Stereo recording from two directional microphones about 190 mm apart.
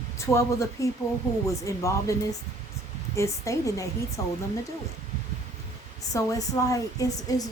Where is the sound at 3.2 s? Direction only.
15° left (ahead or behind).